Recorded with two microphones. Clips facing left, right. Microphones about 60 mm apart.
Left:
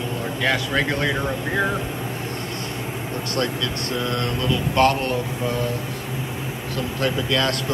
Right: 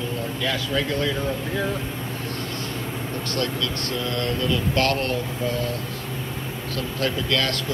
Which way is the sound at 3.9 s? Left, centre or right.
Left.